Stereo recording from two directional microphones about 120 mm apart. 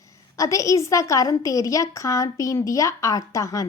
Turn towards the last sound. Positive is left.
turn(degrees=25)  # may be behind; listen again after turning